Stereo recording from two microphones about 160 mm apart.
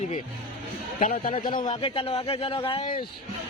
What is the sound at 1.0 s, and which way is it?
Speech, 55° left (ahead or behind).